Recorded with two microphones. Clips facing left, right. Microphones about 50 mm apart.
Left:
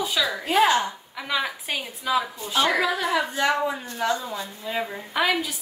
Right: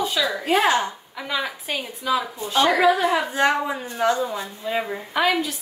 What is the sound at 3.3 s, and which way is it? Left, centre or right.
A woman's voice, right.